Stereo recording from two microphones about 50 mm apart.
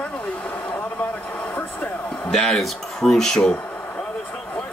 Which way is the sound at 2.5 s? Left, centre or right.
Centre.